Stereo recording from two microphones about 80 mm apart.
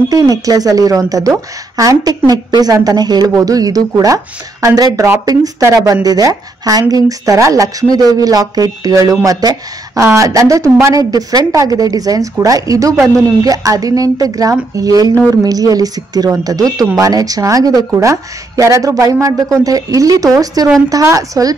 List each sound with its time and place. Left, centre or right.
0.1 s speech: right
5.6 s a woman's voice: right
6.0 s a woman's voice: right
11.1 s speech: right